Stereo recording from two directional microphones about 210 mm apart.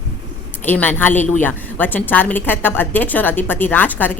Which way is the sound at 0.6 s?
10° left (ahead or behind).